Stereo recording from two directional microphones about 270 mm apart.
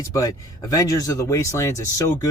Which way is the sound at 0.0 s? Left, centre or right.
Centre.